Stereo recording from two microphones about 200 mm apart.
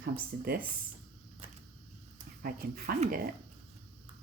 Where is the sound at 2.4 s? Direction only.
50° right (ahead or behind).